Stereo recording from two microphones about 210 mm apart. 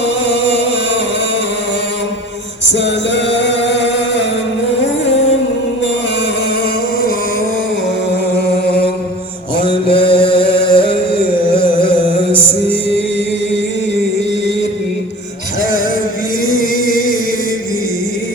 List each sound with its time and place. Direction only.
2.7 s music: 60° left (ahead or behind)
9.6 s chant: 25° left (ahead or behind)
16.8 s music: 40° left (ahead or behind)